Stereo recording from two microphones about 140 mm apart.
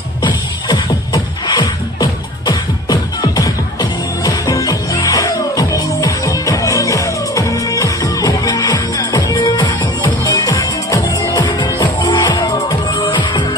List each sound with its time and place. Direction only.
0.2 s music: 30° left (ahead or behind)
9.8 s music: 15° left (ahead or behind)